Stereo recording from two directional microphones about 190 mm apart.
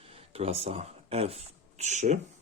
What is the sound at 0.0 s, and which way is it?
Speech, 30° right (ahead or behind).